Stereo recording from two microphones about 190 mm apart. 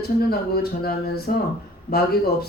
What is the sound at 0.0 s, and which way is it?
A man's voice, 55° left (ahead or behind).